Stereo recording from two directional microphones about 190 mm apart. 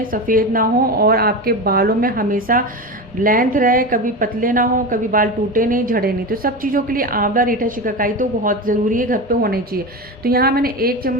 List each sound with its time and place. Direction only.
0.1 s speech: 45° right (ahead or behind)